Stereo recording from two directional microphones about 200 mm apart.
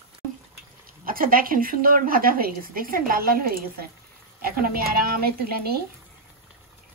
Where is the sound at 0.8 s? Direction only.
45° right (ahead or behind).